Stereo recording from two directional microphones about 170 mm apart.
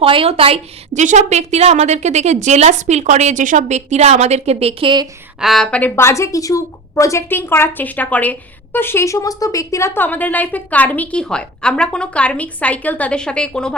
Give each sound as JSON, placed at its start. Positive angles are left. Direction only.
{"t": 0.0, "sound": "a woman's voice", "side_deg": -30}
{"t": 5.4, "sound": "a woman's voice", "side_deg": 0}